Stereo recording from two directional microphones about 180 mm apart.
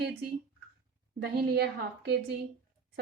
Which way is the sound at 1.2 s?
60° right (ahead or behind).